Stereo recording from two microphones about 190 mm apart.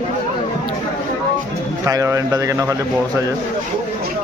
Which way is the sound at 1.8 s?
15° right (ahead or behind).